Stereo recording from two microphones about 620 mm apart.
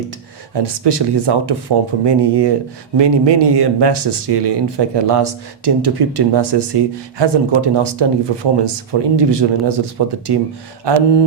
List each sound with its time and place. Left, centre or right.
0.5 s speech: right